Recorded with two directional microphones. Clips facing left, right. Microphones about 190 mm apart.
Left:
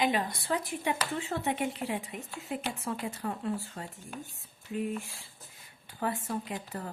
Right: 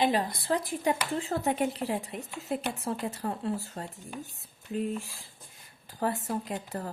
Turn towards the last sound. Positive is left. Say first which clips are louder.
# right 3 dB
turn(degrees=-40)  # may be behind; listen again after turning